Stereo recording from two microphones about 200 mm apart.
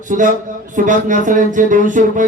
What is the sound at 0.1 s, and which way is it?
Speech, 40° right (ahead or behind).